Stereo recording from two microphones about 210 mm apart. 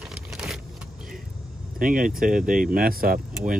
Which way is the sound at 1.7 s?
40° right (ahead or behind).